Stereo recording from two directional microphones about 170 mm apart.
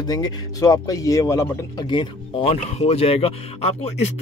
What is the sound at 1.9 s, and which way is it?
A man's voice, 30° left (ahead or behind).